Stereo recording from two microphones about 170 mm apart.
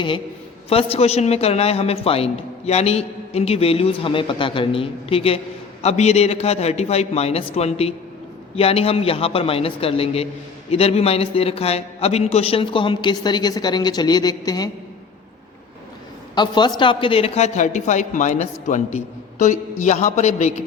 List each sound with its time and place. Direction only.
0.7 s a man's voice: 35° left (ahead or behind)
16.3 s speech: 25° left (ahead or behind); by 20.5 s 45° left (ahead or behind)